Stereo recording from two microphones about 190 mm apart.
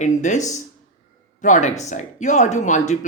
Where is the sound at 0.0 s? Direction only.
40° left (ahead or behind).